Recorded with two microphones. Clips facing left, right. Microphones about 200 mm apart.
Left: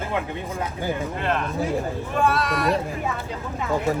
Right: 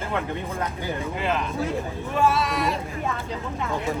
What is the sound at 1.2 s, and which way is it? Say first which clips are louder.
Speech: right 1 dB; centre (ahead or behind).